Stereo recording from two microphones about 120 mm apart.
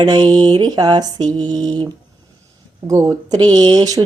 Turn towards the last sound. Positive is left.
turn(degrees=-30)  # may be behind; listen again after turning